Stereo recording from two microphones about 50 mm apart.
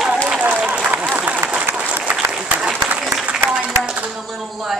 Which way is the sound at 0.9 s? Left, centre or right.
Right.